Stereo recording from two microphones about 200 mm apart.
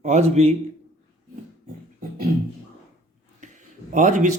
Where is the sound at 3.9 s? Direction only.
40° right (ahead or behind).